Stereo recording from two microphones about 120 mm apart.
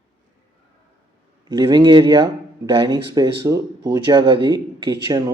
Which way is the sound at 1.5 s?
40° right (ahead or behind).